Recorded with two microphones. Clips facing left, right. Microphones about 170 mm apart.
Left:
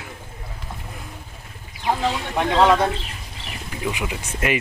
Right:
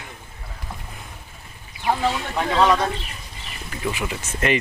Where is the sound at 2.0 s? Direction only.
10° left (ahead or behind).